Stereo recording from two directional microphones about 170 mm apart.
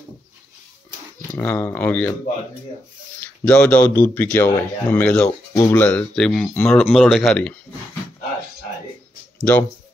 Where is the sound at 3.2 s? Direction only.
10° left (ahead or behind).